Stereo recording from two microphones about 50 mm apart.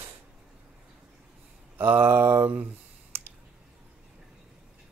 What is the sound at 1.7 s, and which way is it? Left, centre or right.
Speech, right.